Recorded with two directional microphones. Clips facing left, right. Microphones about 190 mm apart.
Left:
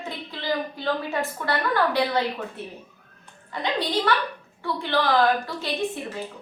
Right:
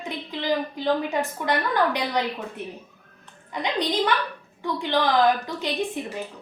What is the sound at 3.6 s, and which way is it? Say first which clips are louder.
A woman's voice: right 1 dB; 15° right (ahead or behind).